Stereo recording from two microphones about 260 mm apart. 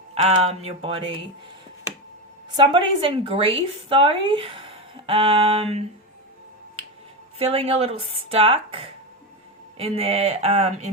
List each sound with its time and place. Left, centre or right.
0.1 s speech: right
2.6 s speech: centre
7.3 s speech: right